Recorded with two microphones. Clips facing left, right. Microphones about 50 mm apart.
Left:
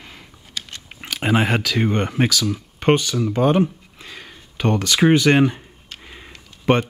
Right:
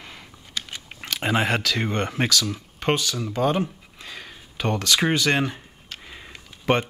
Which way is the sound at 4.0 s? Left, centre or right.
Centre.